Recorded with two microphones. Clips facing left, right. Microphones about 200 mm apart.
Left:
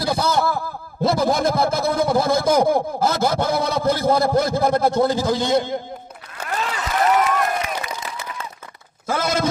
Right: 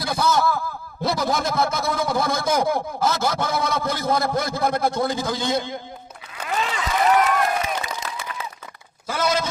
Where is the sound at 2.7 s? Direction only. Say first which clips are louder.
Left 3 dB; 55° left (ahead or behind).